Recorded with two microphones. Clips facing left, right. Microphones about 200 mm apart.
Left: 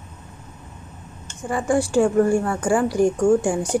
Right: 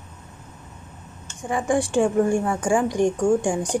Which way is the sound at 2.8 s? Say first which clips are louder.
Left 2 dB; 5° left (ahead or behind).